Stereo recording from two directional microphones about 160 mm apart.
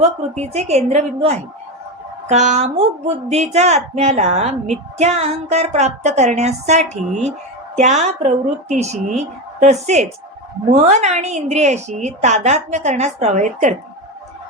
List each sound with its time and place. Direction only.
0.0 s a woman's voice: 45° right (ahead or behind)